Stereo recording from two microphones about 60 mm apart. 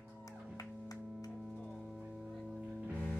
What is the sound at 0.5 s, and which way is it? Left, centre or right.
Music, left.